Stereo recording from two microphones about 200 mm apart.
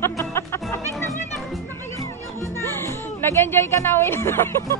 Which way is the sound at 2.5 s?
15° left (ahead or behind).